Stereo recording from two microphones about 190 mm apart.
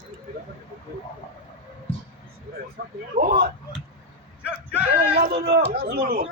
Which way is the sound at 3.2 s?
50° right (ahead or behind).